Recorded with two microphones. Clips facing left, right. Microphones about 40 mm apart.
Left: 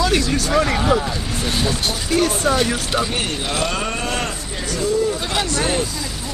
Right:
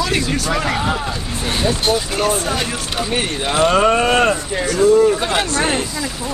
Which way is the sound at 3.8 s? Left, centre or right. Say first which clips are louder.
Right 10 dB; right.